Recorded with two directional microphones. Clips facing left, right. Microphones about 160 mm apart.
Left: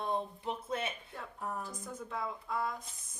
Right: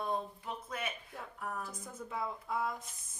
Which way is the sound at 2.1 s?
5° right (ahead or behind).